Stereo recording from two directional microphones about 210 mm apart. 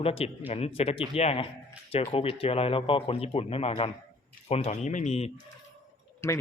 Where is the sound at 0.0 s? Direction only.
25° left (ahead or behind).